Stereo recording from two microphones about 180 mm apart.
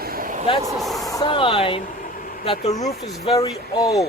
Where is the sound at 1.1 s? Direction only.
25° left (ahead or behind).